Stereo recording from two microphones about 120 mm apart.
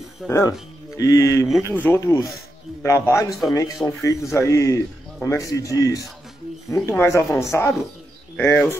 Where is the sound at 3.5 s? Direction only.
30° left (ahead or behind).